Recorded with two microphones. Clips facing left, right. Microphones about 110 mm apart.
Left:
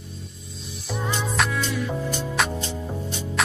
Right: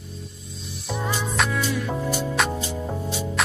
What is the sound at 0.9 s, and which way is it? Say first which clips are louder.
Music: even; 5° right (ahead or behind).